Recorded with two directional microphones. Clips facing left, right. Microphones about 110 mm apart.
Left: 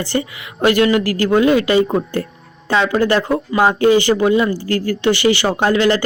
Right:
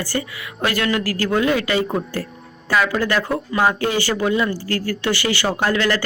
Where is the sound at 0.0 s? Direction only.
20° left (ahead or behind).